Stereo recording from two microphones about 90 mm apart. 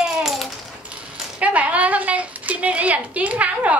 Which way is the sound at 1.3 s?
15° right (ahead or behind).